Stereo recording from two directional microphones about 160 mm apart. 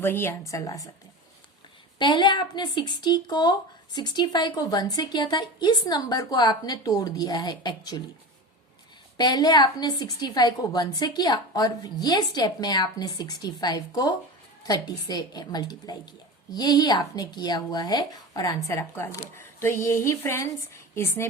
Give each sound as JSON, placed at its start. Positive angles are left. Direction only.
{"t": 0.0, "sound": "a woman's voice", "side_deg": 15}
{"t": 2.0, "sound": "a woman's voice", "side_deg": 30}
{"t": 9.1, "sound": "a woman's voice", "side_deg": 25}